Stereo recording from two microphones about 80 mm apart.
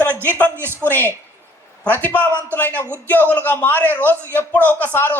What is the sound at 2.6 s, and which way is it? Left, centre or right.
A woman's voice, left.